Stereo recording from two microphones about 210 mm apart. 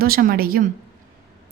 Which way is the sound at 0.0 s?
45° right (ahead or behind).